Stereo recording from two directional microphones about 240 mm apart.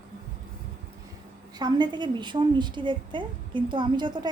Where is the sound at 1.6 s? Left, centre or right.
Centre.